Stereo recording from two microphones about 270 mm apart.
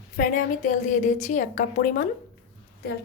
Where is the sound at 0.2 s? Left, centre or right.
Left.